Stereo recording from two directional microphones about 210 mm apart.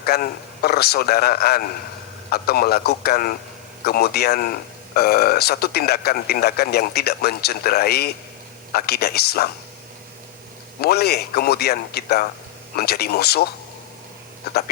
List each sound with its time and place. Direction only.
0.0 s speech: 45° left (ahead or behind)
10.8 s speech: 50° left (ahead or behind)